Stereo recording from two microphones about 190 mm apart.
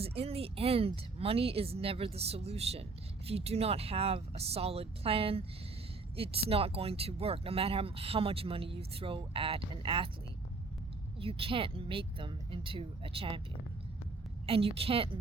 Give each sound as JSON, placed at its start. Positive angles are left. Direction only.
{"t": 0.0, "sound": "a woman's voice", "side_deg": -30}
{"t": 11.2, "sound": "speech", "side_deg": -30}
{"t": 14.4, "sound": "a woman's voice", "side_deg": -30}